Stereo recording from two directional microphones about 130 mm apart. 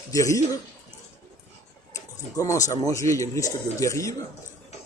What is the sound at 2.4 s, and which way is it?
Speech, 25° left (ahead or behind).